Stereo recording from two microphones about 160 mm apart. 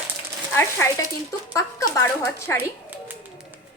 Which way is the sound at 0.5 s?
15° left (ahead or behind).